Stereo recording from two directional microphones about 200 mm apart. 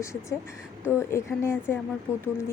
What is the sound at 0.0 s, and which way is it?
Speech, 15° left (ahead or behind).